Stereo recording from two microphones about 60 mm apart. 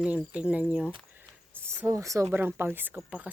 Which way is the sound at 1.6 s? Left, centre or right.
Right.